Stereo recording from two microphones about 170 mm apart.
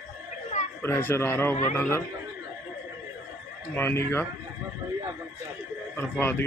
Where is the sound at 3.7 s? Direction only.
15° left (ahead or behind).